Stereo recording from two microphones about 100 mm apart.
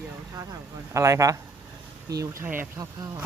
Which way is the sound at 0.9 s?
30° right (ahead or behind).